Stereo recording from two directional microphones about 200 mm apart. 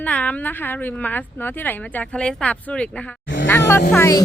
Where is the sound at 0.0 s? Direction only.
5° left (ahead or behind).